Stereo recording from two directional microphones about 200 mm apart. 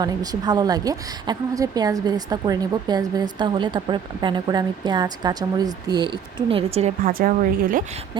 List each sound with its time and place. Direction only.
0.0 s a woman's voice: 20° right (ahead or behind); by 7.9 s 45° right (ahead or behind)